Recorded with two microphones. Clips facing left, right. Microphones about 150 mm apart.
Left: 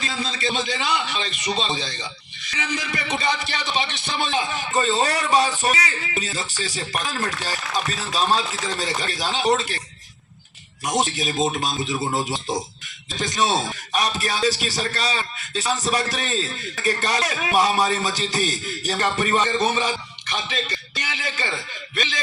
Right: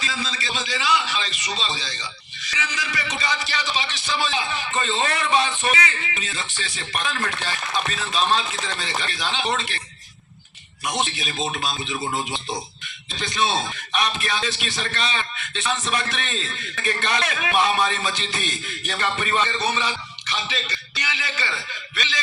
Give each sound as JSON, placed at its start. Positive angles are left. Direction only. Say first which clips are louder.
{"t": 0.0, "sound": "a man's voice", "louder": "left 3 dB", "side_deg": 55}
{"t": 10.8, "sound": "speech", "louder": "left 4 dB", "side_deg": 40}